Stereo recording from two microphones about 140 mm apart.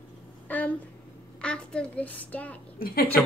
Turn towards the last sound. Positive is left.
turn(degrees=90)